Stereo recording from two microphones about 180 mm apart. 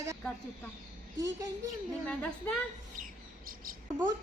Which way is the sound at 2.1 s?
5° left (ahead or behind).